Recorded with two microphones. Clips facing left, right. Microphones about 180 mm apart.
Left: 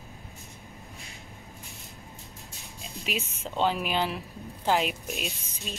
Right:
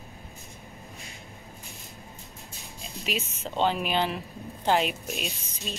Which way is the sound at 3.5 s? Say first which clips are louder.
Right 1 dB; 5° left (ahead or behind).